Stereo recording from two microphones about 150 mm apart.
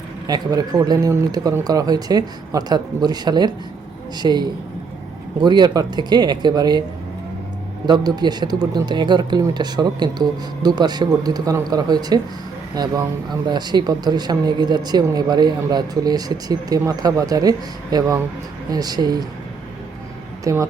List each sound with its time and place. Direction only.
0.3 s speech: 25° right (ahead or behind)
7.9 s speech: 30° right (ahead or behind)
20.4 s speech: 20° right (ahead or behind)